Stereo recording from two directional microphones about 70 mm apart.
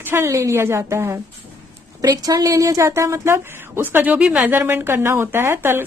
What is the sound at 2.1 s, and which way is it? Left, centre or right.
A woman's voice, right.